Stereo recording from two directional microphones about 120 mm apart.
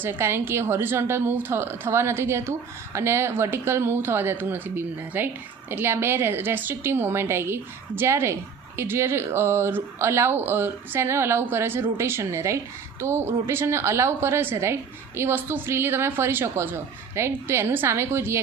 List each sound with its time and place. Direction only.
0.0 s a woman's voice: 20° right (ahead or behind)